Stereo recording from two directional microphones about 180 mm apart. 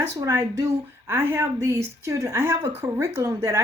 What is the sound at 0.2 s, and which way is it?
Speech, 20° right (ahead or behind).